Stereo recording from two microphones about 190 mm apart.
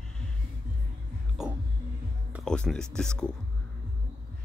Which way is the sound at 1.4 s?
5° right (ahead or behind).